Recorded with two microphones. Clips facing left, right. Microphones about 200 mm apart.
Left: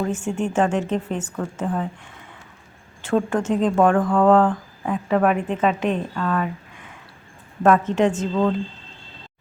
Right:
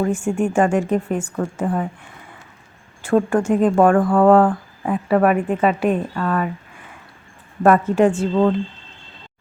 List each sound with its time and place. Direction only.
0.0 s speech: 10° right (ahead or behind)
3.0 s speech: 10° right (ahead or behind)
7.6 s speech: 10° right (ahead or behind)